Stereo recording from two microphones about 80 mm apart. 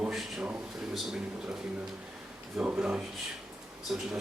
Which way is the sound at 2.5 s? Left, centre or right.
Centre.